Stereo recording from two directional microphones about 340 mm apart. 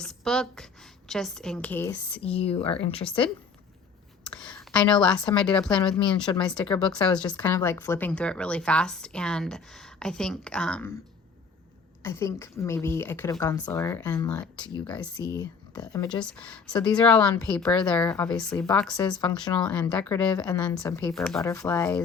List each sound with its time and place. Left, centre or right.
0.0 s a woman's voice: centre
2.2 s a woman's voice: centre
4.3 s a sound: centre
5.4 s speech: centre
5.8 s a woman's voice: centre
6.4 s speech: centre
12.0 s a woman's voice: centre
19.2 s a woman's voice: centre
19.6 s speech: centre